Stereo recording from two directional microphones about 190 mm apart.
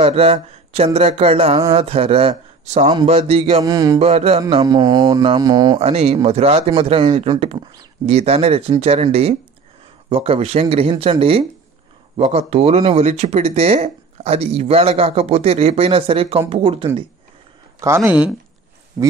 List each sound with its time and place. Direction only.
0.0 s speech: 30° right (ahead or behind)
3.6 s speech: 20° right (ahead or behind)
4.0 s speech: 35° right (ahead or behind)
4.5 s speech: 20° right (ahead or behind)
17.7 s speech: 15° right (ahead or behind)